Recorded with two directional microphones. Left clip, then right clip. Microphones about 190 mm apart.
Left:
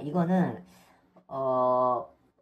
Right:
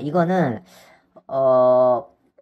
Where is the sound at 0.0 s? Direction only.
40° right (ahead or behind).